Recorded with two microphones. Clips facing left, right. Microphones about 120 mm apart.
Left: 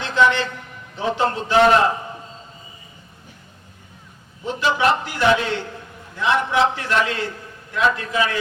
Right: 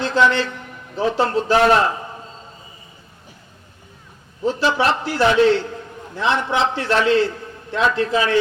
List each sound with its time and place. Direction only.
0.0 s a man's voice: 35° right (ahead or behind)
4.6 s a man's voice: 35° right (ahead or behind)